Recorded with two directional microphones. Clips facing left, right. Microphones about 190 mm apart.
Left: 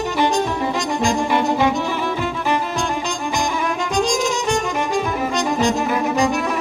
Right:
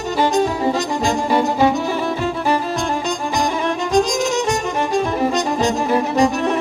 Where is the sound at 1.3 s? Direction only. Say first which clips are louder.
Right 2 dB; 40° right (ahead or behind).